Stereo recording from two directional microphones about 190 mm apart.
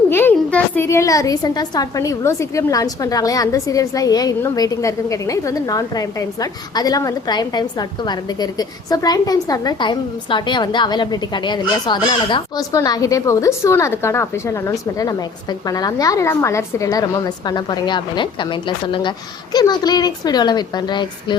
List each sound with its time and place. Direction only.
0.1 s a woman's voice: 10° left (ahead or behind)